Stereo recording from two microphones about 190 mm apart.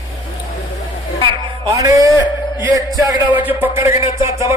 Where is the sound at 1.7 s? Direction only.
15° right (ahead or behind).